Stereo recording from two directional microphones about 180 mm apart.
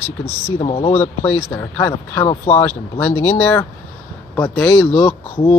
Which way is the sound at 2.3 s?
35° left (ahead or behind).